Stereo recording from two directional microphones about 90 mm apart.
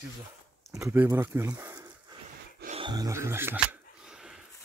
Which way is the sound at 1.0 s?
30° right (ahead or behind).